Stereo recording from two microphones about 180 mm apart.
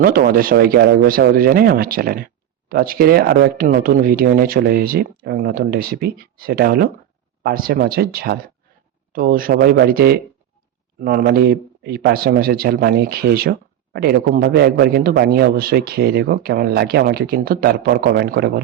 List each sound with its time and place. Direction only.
0.0 s speech: 55° right (ahead or behind)